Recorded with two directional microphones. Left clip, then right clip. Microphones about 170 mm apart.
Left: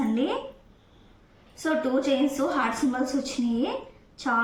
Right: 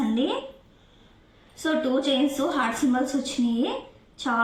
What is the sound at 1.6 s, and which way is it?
A woman's voice, 20° right (ahead or behind).